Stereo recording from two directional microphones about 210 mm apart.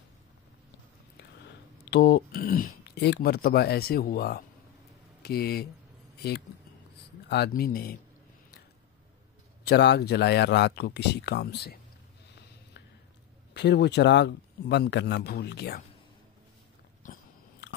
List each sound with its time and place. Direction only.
1.9 s speech: 45° left (ahead or behind)
7.2 s speech: 50° left (ahead or behind)
9.7 s speech: 50° left (ahead or behind)
13.5 s speech: 50° left (ahead or behind)
17.0 s biting: 45° left (ahead or behind)